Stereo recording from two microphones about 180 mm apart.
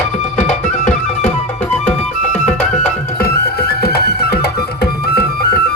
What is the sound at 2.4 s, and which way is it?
Music, 40° left (ahead or behind).